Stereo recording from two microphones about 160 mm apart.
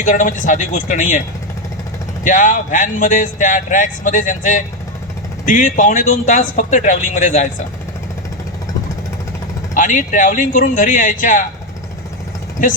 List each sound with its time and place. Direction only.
0.0 s speech: 55° left (ahead or behind)
2.2 s speech: 55° left (ahead or behind)
9.7 s speech: 55° left (ahead or behind)